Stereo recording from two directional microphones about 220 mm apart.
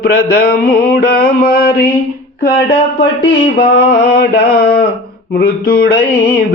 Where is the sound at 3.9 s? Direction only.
45° left (ahead or behind).